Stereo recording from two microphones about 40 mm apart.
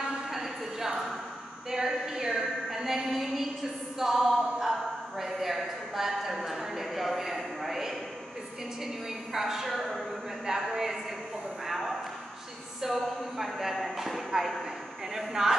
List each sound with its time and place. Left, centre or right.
0.3 s a sound: centre
8.8 s a woman's voice: centre
10.5 s speech: centre
11.6 s a sound: centre
12.9 s speech: centre
15.1 s speech: centre